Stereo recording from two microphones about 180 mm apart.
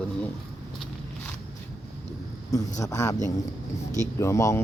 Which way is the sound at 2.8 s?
20° left (ahead or behind).